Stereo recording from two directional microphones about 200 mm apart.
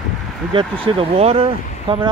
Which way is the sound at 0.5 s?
25° right (ahead or behind).